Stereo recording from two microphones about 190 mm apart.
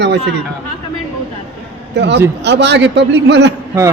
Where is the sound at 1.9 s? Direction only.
65° right (ahead or behind).